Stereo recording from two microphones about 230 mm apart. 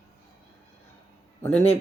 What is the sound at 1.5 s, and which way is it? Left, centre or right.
Speech, left.